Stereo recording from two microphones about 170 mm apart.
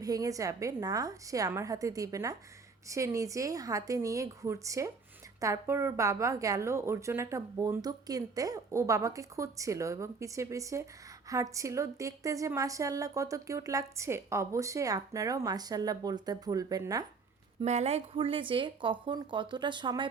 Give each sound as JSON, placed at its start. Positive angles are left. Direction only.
{"t": 0.0, "sound": "a woman's voice", "side_deg": -20}
{"t": 17.6, "sound": "a woman's voice", "side_deg": -40}